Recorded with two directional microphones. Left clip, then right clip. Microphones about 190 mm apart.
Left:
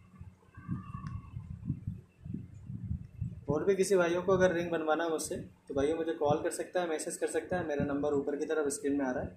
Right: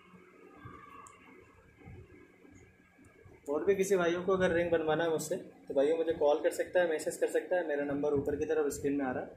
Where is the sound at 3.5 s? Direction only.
5° left (ahead or behind).